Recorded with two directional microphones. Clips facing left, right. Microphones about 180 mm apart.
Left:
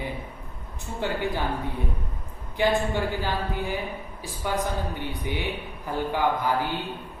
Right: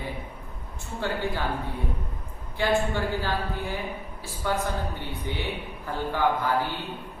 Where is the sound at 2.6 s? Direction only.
15° left (ahead or behind).